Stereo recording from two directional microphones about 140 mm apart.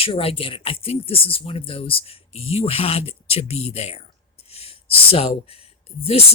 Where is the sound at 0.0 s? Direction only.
40° left (ahead or behind).